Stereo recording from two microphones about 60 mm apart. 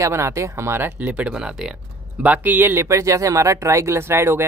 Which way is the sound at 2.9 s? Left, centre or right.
Right.